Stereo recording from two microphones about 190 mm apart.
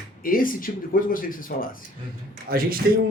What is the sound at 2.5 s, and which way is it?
Speech, 50° right (ahead or behind).